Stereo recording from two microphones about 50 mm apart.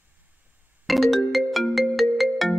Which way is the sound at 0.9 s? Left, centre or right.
Centre.